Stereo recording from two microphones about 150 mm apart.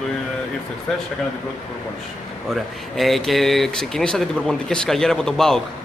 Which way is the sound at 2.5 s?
Centre (ahead or behind).